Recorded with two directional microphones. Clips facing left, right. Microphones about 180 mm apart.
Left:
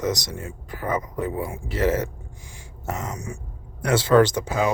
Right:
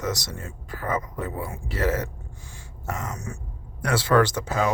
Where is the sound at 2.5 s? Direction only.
20° left (ahead or behind).